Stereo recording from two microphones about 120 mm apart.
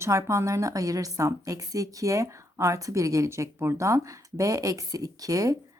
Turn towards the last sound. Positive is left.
turn(degrees=-30)  # may be behind; listen again after turning